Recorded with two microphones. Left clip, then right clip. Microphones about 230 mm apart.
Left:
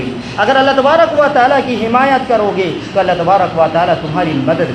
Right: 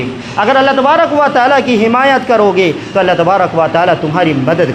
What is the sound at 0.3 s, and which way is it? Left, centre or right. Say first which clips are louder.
A man's voice: right 1 dB; right.